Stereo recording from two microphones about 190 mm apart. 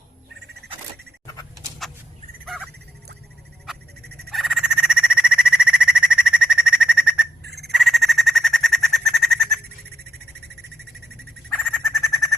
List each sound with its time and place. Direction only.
4.0 s frog: 55° right (ahead or behind)
4.3 s a sound: centre (ahead or behind)
7.4 s frog: 60° right (ahead or behind)
7.7 s bird: centre (ahead or behind)
11.4 s bird: centre (ahead or behind)